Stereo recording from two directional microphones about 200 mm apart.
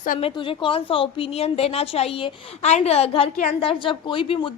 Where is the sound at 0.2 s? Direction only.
25° left (ahead or behind).